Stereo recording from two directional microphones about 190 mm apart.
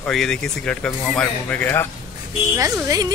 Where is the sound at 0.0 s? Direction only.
5° left (ahead or behind).